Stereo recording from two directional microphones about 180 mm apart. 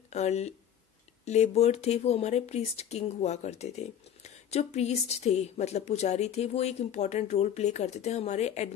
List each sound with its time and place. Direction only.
0.1 s speech: 35° left (ahead or behind)